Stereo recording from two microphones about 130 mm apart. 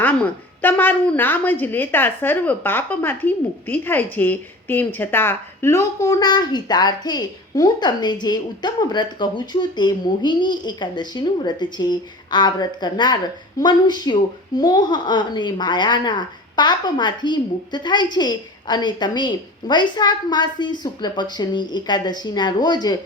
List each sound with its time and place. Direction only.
0.0 s a woman's voice: 10° left (ahead or behind); by 23.0 s 30° left (ahead or behind)